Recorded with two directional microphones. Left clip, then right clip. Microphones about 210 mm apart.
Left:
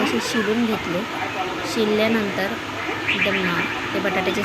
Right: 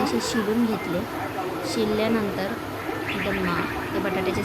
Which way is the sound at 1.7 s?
5° left (ahead or behind).